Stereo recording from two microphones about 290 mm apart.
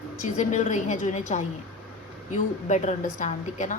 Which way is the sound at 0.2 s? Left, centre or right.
Left.